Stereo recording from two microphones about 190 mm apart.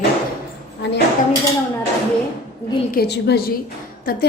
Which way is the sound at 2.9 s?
60° left (ahead or behind).